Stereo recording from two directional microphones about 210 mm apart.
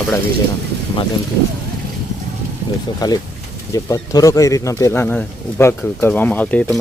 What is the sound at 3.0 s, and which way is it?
Speech, 20° left (ahead or behind).